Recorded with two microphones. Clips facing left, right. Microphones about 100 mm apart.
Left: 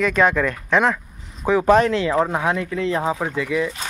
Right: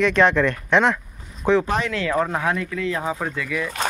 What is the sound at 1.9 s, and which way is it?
Speech, 20° left (ahead or behind).